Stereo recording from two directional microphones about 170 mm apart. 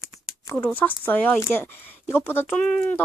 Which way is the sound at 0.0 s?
15° left (ahead or behind).